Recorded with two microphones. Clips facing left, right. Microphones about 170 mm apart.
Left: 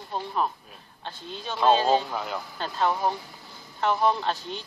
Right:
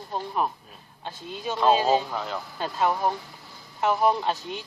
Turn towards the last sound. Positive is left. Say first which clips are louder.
# right 1 dB
turn(degrees=-5)  # may be behind; listen again after turning